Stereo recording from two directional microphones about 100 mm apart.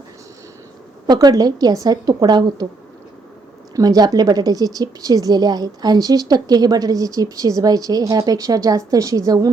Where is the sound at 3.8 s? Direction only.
40° right (ahead or behind).